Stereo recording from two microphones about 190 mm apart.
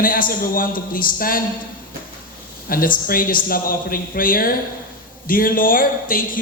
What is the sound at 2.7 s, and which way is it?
Speech, 45° left (ahead or behind).